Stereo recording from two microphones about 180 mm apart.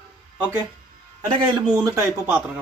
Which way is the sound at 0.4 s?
15° right (ahead or behind).